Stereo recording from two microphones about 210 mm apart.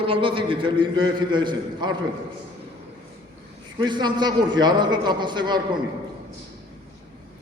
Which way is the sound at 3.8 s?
20° right (ahead or behind).